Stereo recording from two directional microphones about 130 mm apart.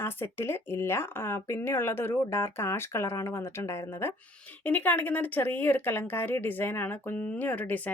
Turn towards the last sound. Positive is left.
turn(degrees=10)  # may be behind; listen again after turning